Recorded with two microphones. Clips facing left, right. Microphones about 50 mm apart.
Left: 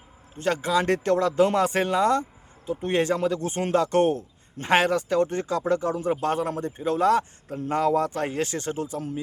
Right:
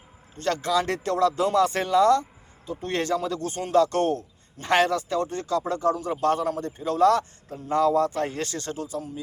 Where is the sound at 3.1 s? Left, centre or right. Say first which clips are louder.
Left 1 dB; left.